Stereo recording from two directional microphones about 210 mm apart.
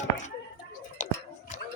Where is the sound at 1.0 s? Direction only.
35° left (ahead or behind).